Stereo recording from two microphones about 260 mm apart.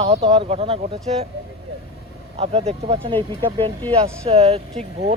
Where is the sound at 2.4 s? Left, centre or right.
Right.